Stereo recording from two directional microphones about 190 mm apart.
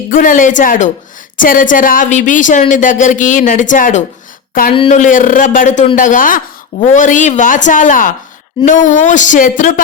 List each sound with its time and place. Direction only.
0.1 s a woman's voice: 45° left (ahead or behind)